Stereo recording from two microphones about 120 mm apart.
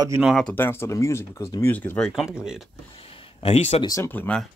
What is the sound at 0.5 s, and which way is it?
Speech, 20° left (ahead or behind).